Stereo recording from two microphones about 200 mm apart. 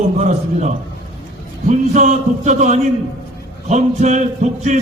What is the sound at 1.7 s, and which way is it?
A man's voice, 35° right (ahead or behind).